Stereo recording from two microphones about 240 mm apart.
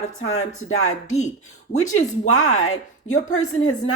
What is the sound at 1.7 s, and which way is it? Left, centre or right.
Speech, left.